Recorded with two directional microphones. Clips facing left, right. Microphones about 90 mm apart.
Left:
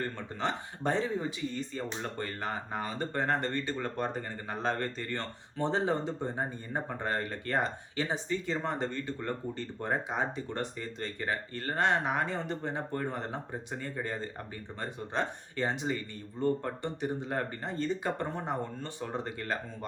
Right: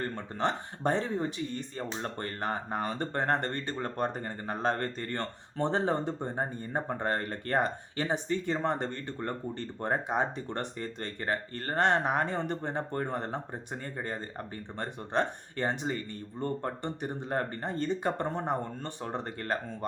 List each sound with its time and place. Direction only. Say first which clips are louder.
0.2 s speech: right 3 dB; 50° right (ahead or behind)
6.3 s speech: right 2 dB; 40° right (ahead or behind)
15.9 s speech: even; 40° right (ahead or behind)